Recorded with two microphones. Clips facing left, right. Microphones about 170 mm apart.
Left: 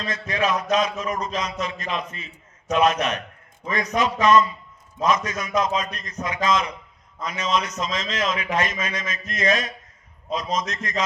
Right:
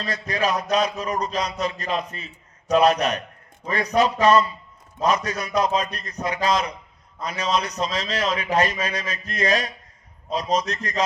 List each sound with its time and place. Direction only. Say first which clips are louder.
0.0 s a man's voice: even; 35° right (ahead or behind)